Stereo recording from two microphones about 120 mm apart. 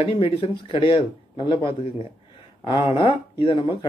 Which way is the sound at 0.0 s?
50° left (ahead or behind).